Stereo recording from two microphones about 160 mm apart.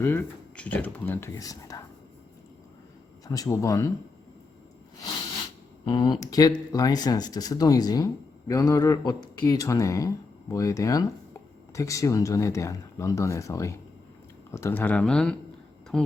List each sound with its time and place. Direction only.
0.0 s speech: 10° left (ahead or behind)
3.2 s speech: 20° left (ahead or behind)
5.8 s speech: 30° left (ahead or behind); by 16.1 s 5° left (ahead or behind)